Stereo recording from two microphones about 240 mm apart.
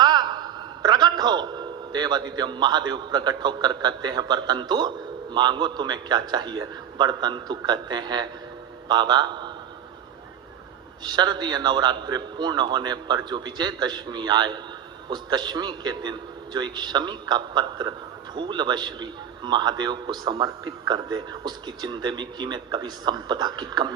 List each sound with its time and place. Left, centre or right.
0.0 s a man's voice: centre
11.0 s a man's voice: centre